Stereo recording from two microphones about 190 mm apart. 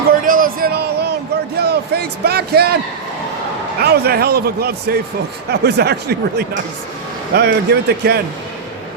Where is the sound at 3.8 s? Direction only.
55° right (ahead or behind).